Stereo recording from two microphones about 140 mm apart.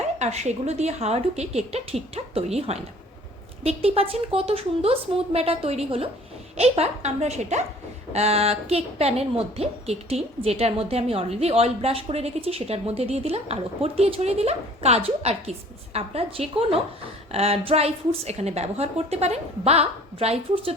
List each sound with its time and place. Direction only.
0.2 s a woman's voice: 55° right (ahead or behind)